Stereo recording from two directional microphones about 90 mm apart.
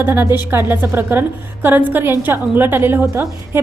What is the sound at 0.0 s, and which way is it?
A woman's voice, 25° right (ahead or behind).